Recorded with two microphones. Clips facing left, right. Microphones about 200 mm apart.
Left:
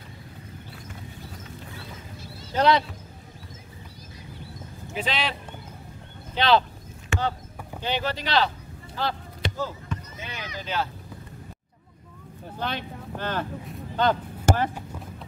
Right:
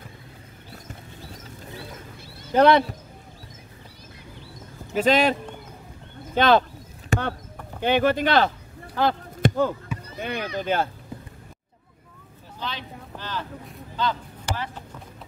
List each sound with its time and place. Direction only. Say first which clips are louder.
2.5 s speech: right 5 dB; 55° right (ahead or behind)
4.9 s speech: right 10 dB; 45° right (ahead or behind)
6.3 s speech: right 3 dB; 50° right (ahead or behind)
7.1 s a sound: right 2 dB; 40° right (ahead or behind)
7.8 s speech: right 8 dB; 55° right (ahead or behind)
8.9 s chop: right 6 dB; 55° right (ahead or behind)
10.1 s speech: right 8 dB; 60° right (ahead or behind)
12.5 s speech: left 3 dB; 55° left (ahead or behind)
13.9 s a sound: left 4 dB; 50° left (ahead or behind)